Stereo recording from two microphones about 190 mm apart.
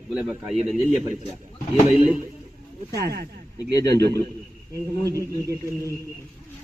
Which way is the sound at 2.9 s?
55° right (ahead or behind).